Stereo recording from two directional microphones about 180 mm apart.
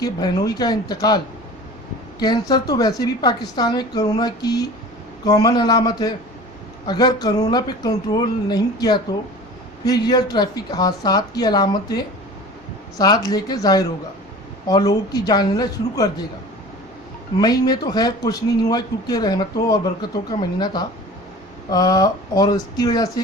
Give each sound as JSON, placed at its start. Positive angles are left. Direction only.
{"t": 0.0, "sound": "speech", "side_deg": 20}
{"t": 17.4, "sound": "speech", "side_deg": 20}